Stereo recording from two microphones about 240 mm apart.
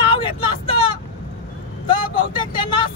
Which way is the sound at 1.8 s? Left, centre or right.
Left.